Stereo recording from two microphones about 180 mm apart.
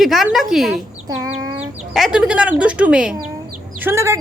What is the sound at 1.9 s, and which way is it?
A woman's voice, 5° right (ahead or behind).